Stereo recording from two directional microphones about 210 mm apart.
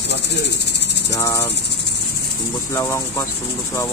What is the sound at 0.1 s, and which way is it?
Cricket, 55° left (ahead or behind).